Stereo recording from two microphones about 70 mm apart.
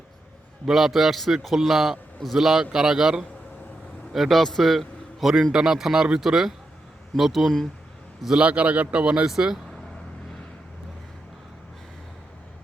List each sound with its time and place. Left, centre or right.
0.6 s a man's voice: centre
8.4 s a man's voice: centre